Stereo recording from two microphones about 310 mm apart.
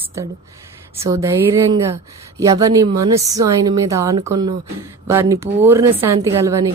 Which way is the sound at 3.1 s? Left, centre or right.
Centre.